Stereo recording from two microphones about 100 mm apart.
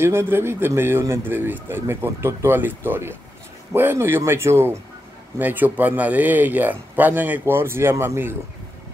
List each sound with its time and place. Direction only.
0.0 s speech: 25° right (ahead or behind)